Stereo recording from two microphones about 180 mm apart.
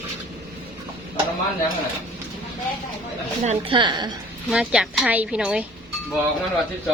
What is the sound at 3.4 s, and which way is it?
Speech, 35° right (ahead or behind).